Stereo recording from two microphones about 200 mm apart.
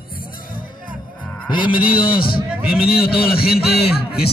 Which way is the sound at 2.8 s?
50° left (ahead or behind).